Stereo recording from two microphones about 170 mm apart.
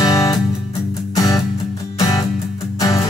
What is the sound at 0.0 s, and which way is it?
Music, 20° left (ahead or behind).